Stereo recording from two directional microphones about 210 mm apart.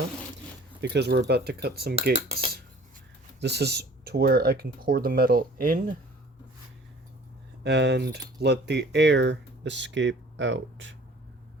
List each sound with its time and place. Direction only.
0.8 s speech: 55° right (ahead or behind)
2.1 s cutlery: 30° right (ahead or behind)
3.4 s speech: 50° right (ahead or behind)
7.6 s speech: 55° right (ahead or behind)